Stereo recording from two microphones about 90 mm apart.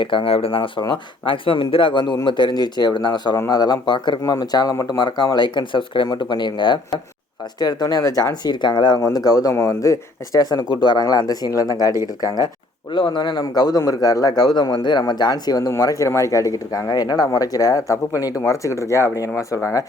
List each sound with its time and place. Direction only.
0.0 s speech: 70° left (ahead or behind); by 0.7 s 85° left
0.8 s speech: 60° left (ahead or behind)
4.2 s speech: 45° left (ahead or behind); by 7.0 s 60° left (ahead or behind)
7.6 s speech: 45° left (ahead or behind)
9.0 s speech: 35° left (ahead or behind)
12.9 s speech: 60° left (ahead or behind); by 19.3 s 35° left (ahead or behind)